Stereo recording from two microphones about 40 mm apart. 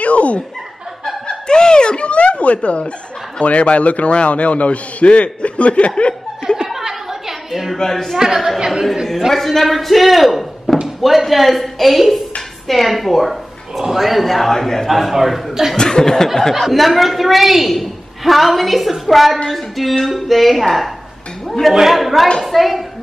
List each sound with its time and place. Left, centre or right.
0.0 s chuckle: left
1.2 s a sound: centre
3.3 s a man's voice: left
6.5 s chatter: centre
7.7 s speech: centre
8.5 s speech: centre
9.3 s a woman's voice: centre
15.7 s speech: centre
16.6 s a woman's voice: centre